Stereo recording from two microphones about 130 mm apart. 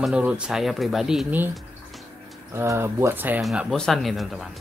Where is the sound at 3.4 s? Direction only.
Centre (ahead or behind).